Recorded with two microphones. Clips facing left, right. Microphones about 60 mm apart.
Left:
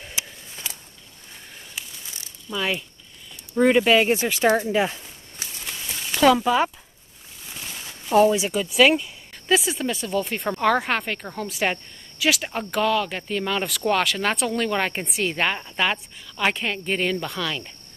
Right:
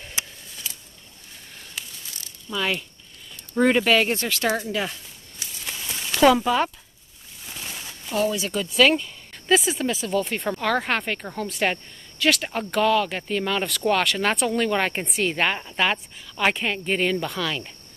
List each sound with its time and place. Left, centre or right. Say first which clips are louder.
1.8 s ratchet: even; centre
2.5 s speech: even; centre
5.7 s a sound: right 1 dB; centre
8.1 s speech: left 7 dB; left
8.5 s speech: left 1 dB; centre